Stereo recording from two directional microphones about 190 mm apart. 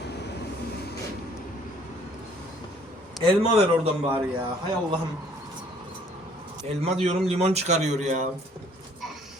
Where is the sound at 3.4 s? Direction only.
30° right (ahead or behind).